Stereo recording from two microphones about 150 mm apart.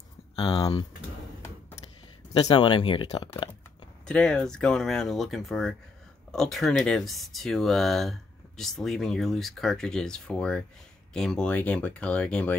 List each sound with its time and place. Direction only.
0.6 s speech: 25° left (ahead or behind)
2.4 s speech: 30° left (ahead or behind)
4.0 s speech: 5° left (ahead or behind)